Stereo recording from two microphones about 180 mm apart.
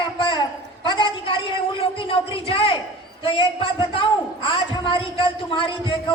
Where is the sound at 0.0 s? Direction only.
25° left (ahead or behind).